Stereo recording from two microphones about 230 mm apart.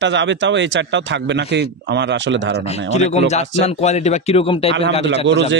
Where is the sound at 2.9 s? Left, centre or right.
Left.